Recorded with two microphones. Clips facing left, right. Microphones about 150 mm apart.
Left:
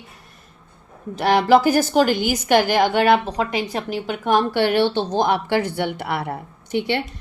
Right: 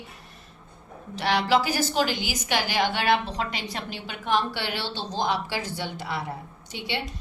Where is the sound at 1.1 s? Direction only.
50° left (ahead or behind).